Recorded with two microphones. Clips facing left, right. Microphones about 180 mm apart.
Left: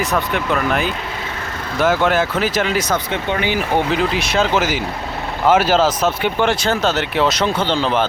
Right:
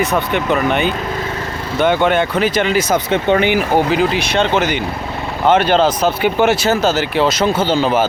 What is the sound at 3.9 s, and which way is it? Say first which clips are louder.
Speech: right 3 dB; centre (ahead or behind).